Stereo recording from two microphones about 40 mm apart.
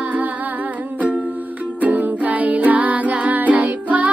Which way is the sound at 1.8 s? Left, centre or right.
Right.